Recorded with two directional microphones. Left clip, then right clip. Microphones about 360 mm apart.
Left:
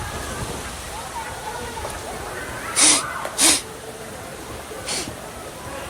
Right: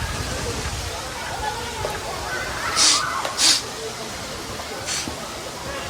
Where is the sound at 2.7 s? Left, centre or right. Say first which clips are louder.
Even; centre.